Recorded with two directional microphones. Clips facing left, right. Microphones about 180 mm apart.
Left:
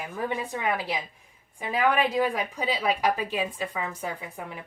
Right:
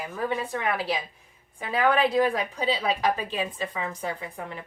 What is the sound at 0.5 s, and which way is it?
Speech, 15° left (ahead or behind).